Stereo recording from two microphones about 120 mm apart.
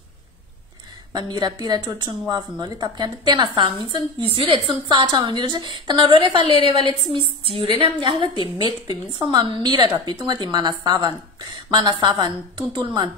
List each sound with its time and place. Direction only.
1.3 s speech: 35° right (ahead or behind)
6.5 s a woman's voice: 55° left (ahead or behind)
6.9 s a woman's voice: 50° right (ahead or behind)